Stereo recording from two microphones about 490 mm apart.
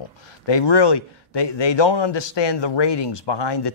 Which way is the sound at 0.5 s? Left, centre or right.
Left.